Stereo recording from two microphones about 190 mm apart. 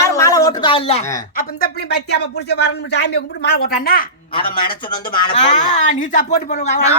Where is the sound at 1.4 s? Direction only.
55° left (ahead or behind).